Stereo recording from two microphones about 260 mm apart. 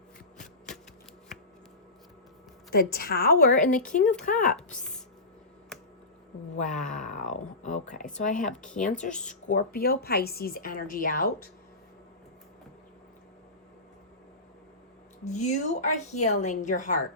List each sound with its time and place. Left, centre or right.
0.3 s shuffling cards: centre
2.6 s a woman's voice: left
4.8 s chopping: centre
6.6 s a woman's voice: left
15.2 s a woman's voice: left